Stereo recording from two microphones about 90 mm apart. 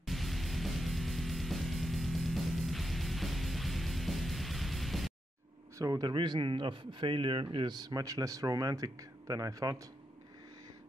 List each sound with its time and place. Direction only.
0.0 s music: centre (ahead or behind)
5.8 s a man's voice: 45° right (ahead or behind); by 7.7 s 70° right (ahead or behind)
7.7 s speech: 45° right (ahead or behind)